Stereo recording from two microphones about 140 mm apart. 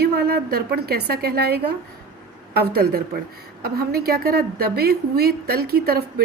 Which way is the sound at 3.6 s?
90° right.